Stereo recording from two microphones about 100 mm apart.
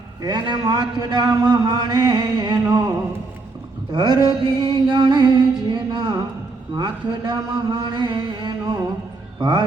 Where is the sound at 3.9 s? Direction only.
45° right (ahead or behind).